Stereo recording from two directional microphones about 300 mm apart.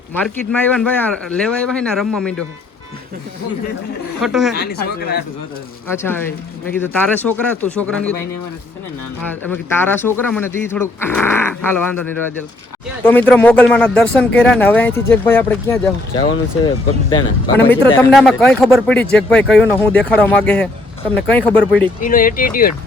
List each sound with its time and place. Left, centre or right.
0.2 s speech: centre
4.2 s speech: centre
4.5 s speech: left
5.9 s speech: centre
9.5 s speech: centre
17.7 s speech: centre
22.0 s speech: left